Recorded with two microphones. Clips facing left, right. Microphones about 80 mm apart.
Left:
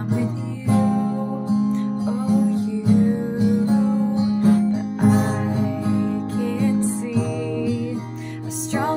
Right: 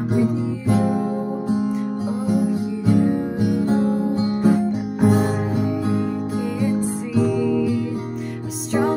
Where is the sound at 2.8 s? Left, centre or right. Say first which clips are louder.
Right 1 dB; right.